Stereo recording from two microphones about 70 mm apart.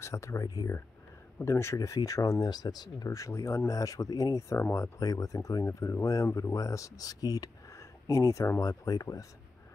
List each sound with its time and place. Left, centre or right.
0.0 s speech: left
3.1 s speech: left
5.0 s speech: left
8.5 s speech: left